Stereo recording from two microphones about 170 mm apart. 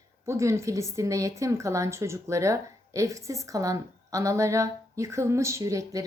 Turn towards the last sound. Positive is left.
turn(degrees=-20)  # may be behind; listen again after turning